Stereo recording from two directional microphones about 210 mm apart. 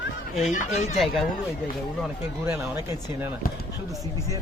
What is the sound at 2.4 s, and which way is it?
Speech, 10° right (ahead or behind).